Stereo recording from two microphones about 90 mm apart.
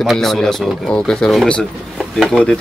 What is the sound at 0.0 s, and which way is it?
Speech, centre (ahead or behind).